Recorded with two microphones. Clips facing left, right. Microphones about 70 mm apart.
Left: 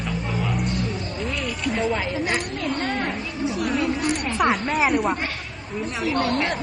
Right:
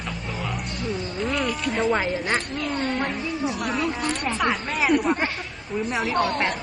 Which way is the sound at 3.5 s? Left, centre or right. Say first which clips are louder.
Left 6 dB; right.